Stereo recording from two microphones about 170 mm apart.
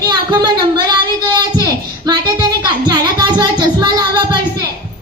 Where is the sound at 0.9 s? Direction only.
25° right (ahead or behind).